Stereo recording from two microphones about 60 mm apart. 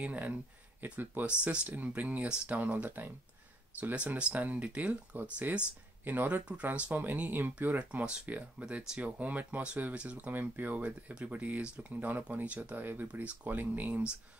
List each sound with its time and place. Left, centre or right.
0.0 s speech: right